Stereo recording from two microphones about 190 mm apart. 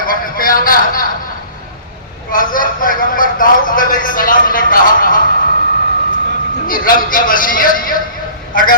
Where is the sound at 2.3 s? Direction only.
45° left (ahead or behind).